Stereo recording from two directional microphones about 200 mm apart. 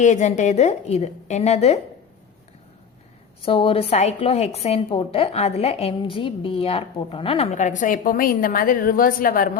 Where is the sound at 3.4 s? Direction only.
25° left (ahead or behind).